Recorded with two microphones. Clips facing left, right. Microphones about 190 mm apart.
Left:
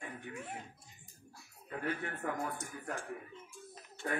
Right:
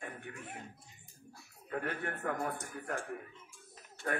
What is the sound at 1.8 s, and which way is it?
Speech, 50° right (ahead or behind).